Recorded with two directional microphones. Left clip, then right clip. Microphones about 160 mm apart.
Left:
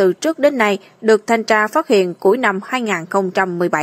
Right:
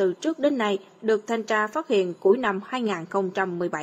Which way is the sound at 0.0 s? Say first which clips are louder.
Left 9 dB; 30° left (ahead or behind).